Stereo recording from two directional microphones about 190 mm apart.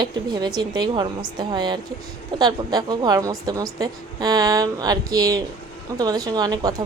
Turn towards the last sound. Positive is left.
turn(degrees=-20)  # may be behind; listen again after turning